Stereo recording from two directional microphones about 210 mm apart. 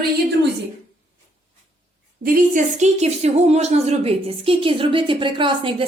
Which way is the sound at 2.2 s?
40° right (ahead or behind).